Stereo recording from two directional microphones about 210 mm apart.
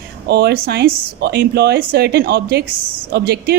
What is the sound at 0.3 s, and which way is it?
Speech, 50° right (ahead or behind).